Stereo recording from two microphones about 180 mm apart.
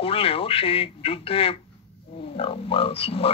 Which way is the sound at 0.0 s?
30° left (ahead or behind).